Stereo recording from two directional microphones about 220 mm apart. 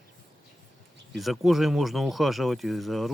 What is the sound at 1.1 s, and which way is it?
Speech, centre (ahead or behind).